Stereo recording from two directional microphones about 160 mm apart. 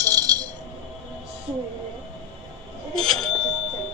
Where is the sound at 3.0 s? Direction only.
5° left (ahead or behind).